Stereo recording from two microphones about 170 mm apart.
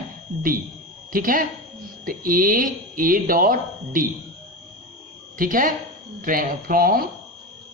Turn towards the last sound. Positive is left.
turn(degrees=-60)  # may be behind; listen again after turning